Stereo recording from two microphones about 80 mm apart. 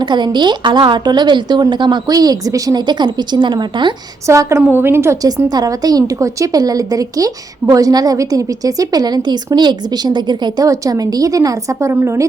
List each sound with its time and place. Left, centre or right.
0.0 s a woman's voice: right
2.0 s a woman's voice: right
4.3 s a woman's voice: right
5.5 s a woman's voice: right
10.7 s a woman's voice: right